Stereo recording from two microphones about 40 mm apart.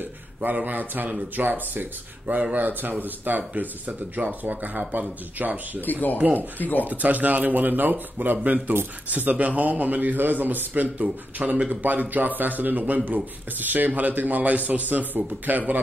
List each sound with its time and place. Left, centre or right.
0.4 s speech: right
5.8 s speech: left
6.8 s speech: right